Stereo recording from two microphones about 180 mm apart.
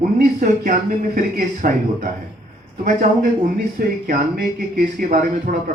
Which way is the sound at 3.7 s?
55° right (ahead or behind).